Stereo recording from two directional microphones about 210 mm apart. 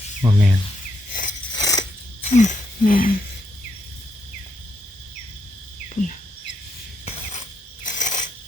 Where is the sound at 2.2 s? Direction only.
35° left (ahead or behind).